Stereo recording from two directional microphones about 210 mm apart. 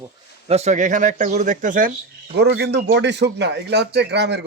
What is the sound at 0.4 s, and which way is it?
Speech, 30° right (ahead or behind).